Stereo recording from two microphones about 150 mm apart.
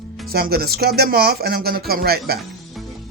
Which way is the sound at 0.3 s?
90° right.